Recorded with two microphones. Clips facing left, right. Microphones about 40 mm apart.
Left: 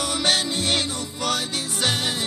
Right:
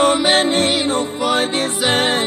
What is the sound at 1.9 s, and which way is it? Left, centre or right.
Music, right.